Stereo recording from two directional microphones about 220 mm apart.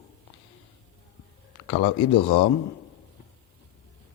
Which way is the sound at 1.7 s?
25° left (ahead or behind).